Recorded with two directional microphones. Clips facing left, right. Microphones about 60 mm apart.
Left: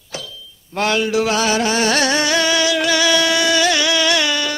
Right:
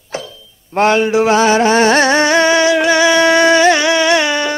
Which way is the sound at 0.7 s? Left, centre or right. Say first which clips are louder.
Right 6 dB; right.